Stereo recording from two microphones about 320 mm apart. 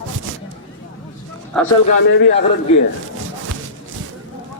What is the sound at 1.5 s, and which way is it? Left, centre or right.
Speech, centre.